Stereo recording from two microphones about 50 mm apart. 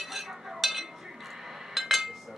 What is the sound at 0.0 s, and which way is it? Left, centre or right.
Chink, centre.